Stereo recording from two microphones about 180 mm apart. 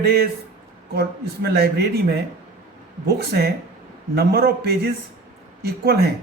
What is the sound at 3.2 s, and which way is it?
Speech, 60° right (ahead or behind).